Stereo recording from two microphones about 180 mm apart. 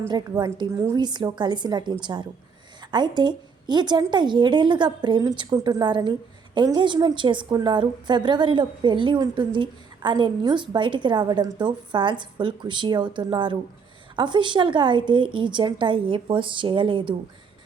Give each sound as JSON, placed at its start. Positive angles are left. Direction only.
{"t": 0.1, "sound": "a woman's voice", "side_deg": -20}